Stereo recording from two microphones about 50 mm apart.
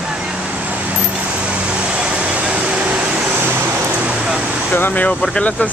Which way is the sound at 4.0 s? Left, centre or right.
Right.